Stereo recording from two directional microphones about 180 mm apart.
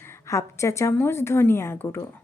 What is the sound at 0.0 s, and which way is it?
A woman's voice, 15° left (ahead or behind).